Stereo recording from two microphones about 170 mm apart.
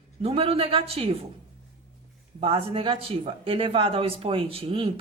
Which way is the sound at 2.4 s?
30° right (ahead or behind).